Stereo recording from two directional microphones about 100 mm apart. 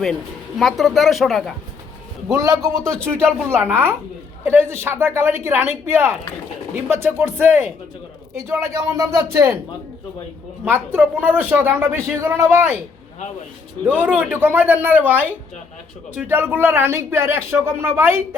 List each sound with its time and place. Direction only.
0.6 s speech: centre (ahead or behind)
2.3 s speech: 35° right (ahead or behind)
2.9 s speech: 10° left (ahead or behind)
3.5 s speech: 20° right (ahead or behind)
10.7 s speech: 20° right (ahead or behind)
12.2 s speech: 30° right (ahead or behind)
14.0 s speech: 15° right (ahead or behind)